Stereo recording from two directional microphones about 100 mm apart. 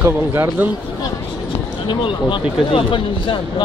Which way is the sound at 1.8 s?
55° left (ahead or behind).